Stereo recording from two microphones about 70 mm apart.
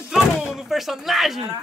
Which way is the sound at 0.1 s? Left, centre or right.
Centre.